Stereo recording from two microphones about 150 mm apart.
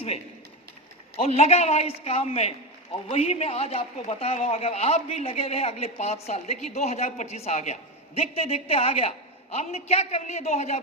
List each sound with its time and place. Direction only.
1.2 s a man's voice: 45° left (ahead or behind)